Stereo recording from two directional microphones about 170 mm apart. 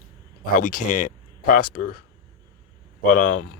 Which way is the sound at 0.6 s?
55° left (ahead or behind).